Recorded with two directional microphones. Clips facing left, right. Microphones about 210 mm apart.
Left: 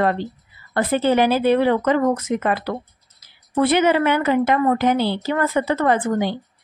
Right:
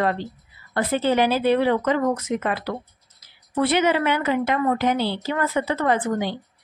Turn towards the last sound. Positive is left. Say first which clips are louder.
# left 3 dB
turn(degrees=50)  # may be behind; listen again after turning